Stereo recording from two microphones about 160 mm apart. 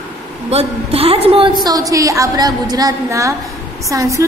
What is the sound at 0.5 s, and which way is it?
A woman's voice, 40° right (ahead or behind).